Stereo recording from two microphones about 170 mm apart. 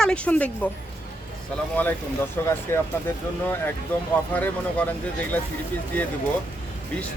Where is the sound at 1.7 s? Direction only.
10° left (ahead or behind).